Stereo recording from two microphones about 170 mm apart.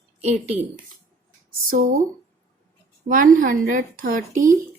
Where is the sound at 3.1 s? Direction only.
55° right (ahead or behind).